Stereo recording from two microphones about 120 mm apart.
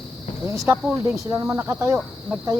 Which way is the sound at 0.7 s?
25° right (ahead or behind).